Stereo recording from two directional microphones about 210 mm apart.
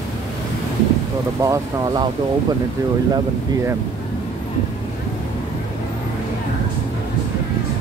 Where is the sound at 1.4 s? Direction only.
15° right (ahead or behind).